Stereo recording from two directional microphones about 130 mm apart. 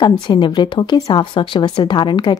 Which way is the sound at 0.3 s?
35° left (ahead or behind).